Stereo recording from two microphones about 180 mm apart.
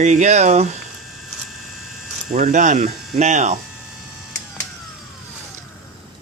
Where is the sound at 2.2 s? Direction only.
45° right (ahead or behind).